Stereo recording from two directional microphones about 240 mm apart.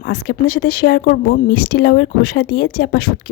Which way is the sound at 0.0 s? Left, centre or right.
Left.